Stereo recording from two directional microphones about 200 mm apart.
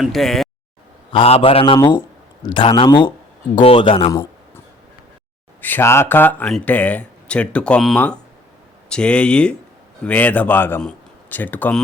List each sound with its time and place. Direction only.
0.0 s speech: centre (ahead or behind)
1.1 s speech: 30° left (ahead or behind)
4.1 s a sound: 15° left (ahead or behind)
5.6 s speech: 10° left (ahead or behind)